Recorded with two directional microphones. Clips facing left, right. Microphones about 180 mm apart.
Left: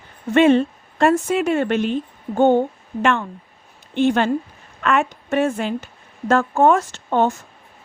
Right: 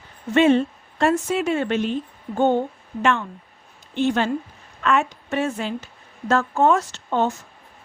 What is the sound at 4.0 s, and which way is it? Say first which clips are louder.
A woman's voice: left 4 dB; 60° left (ahead or behind).